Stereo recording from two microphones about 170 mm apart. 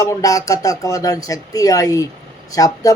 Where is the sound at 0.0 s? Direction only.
20° left (ahead or behind).